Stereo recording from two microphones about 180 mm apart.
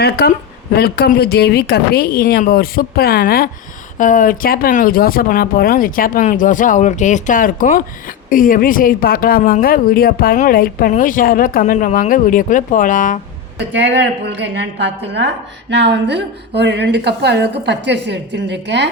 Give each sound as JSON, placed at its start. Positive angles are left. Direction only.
{"t": 0.0, "sound": "a woman's voice", "side_deg": 60}
{"t": 14.5, "sound": "a woman's voice", "side_deg": -75}